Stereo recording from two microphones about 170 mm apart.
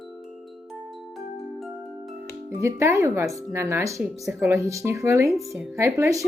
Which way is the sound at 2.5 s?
15° right (ahead or behind).